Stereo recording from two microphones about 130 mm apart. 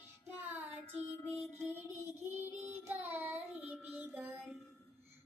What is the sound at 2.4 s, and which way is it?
Child singing, 15° right (ahead or behind).